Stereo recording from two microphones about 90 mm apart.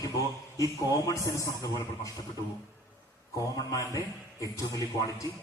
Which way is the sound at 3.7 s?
35° left (ahead or behind).